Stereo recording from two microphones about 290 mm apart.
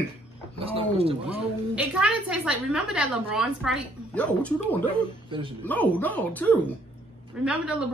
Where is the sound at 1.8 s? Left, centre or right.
Centre.